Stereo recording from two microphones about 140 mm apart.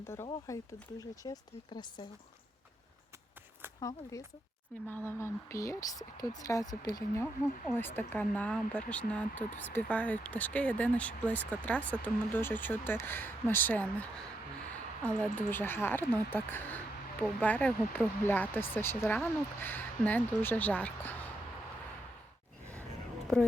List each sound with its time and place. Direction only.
0.4 s speech: 25° left (ahead or behind)
3.8 s speech: 25° left (ahead or behind)